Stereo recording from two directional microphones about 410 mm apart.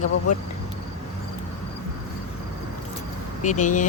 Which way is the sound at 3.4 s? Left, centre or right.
Centre.